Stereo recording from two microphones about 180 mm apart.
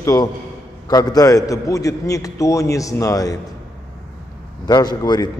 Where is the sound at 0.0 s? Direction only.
20° left (ahead or behind).